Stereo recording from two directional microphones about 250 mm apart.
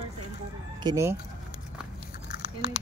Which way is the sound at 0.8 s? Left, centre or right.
Centre.